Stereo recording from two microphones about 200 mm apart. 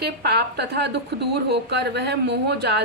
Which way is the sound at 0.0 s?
55° right (ahead or behind).